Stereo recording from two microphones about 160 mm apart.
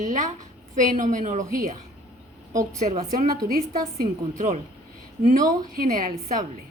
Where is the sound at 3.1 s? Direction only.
65° right (ahead or behind).